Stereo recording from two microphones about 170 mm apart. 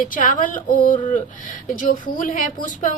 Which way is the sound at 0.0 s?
50° left (ahead or behind).